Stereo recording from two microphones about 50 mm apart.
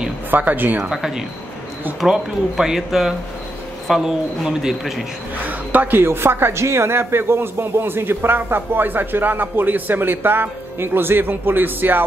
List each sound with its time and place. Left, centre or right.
0.3 s speech: right
0.9 s speech: centre
5.5 s speech: right
6.0 s a man's voice: right
6.6 s a man's voice: right